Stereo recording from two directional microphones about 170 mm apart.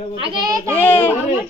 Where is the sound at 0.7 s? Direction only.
15° left (ahead or behind).